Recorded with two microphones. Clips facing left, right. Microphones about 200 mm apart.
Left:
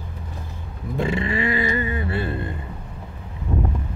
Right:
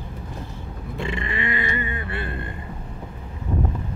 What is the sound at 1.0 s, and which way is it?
Music, 35° left (ahead or behind).